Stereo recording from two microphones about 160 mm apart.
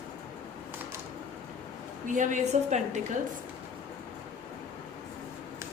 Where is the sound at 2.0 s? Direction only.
50° right (ahead or behind).